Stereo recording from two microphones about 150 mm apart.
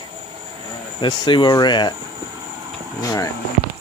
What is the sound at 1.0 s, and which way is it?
Speech, 30° left (ahead or behind).